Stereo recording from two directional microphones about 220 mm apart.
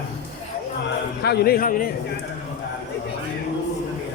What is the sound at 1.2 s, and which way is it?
Speech, 45° left (ahead or behind).